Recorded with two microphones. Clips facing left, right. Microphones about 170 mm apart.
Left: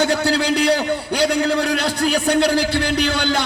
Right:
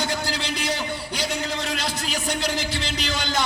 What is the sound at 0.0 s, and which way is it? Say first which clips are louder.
A man's voice: left 9 dB; 70° left (ahead or behind).